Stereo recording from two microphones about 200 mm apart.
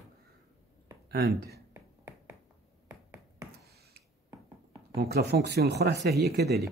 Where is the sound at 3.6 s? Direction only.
50° right (ahead or behind).